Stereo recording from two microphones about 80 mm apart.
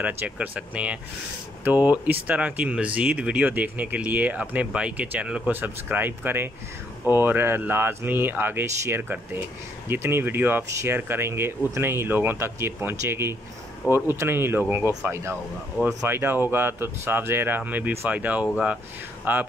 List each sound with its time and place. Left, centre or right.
0.0 s speech: centre